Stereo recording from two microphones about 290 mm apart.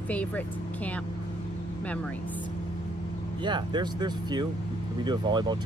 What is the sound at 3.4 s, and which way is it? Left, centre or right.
Speech, centre.